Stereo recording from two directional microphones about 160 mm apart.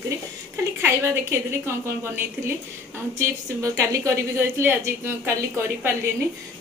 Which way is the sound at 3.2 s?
20° right (ahead or behind).